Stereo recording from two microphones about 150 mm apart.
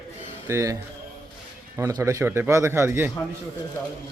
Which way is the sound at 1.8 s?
20° right (ahead or behind).